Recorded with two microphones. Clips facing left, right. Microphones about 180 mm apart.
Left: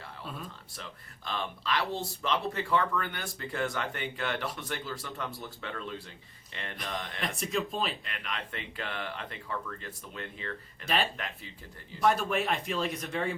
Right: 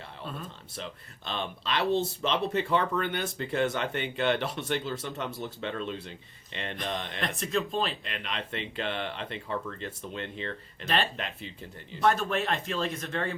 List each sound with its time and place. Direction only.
0.8 s speech: 25° right (ahead or behind)
7.2 s speech: 5° left (ahead or behind)
8.0 s speech: 25° right (ahead or behind)
10.8 s speech: 5° left (ahead or behind)